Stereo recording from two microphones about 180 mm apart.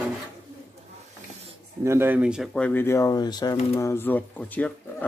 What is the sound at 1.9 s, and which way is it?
Speech, 10° right (ahead or behind).